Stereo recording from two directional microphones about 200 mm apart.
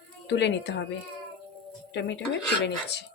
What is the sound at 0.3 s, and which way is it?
Speech, 60° left (ahead or behind).